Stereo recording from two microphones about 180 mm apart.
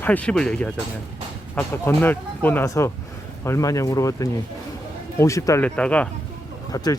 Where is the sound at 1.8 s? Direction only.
10° left (ahead or behind).